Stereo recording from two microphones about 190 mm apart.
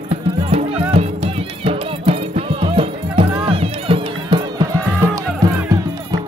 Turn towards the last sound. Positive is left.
turn(degrees=-20)  # may be behind; listen again after turning